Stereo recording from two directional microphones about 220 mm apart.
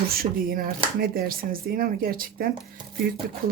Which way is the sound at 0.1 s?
40° right (ahead or behind).